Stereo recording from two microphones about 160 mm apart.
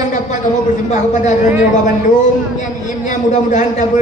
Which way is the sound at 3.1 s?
50° left (ahead or behind).